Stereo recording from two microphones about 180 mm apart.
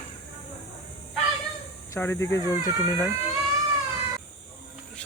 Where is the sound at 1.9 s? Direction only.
15° left (ahead or behind).